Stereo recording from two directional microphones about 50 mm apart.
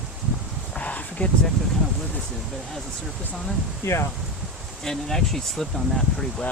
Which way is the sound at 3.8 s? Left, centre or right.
Left.